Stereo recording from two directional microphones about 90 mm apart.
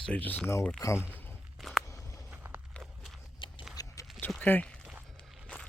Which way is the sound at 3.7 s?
40° left (ahead or behind).